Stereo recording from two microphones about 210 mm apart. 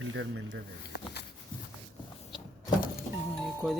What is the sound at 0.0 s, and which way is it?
Speech, 70° right (ahead or behind).